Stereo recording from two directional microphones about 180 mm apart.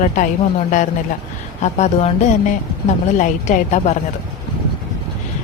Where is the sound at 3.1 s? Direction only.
40° left (ahead or behind).